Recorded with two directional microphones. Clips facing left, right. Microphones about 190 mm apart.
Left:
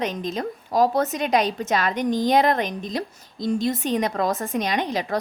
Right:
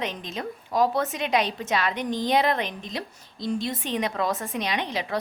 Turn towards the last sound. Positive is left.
turn(degrees=45)  # may be behind; listen again after turning